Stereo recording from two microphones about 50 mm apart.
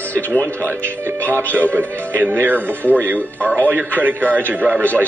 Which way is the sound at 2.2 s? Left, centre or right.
Right.